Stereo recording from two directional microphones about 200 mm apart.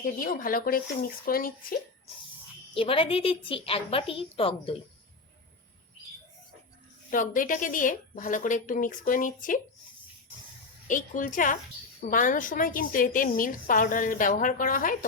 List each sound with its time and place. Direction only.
0.0 s a woman's voice: 45° left (ahead or behind)
2.7 s a woman's voice: 25° left (ahead or behind)
7.1 s speech: 40° left (ahead or behind)
10.8 s a woman's voice: 40° left (ahead or behind)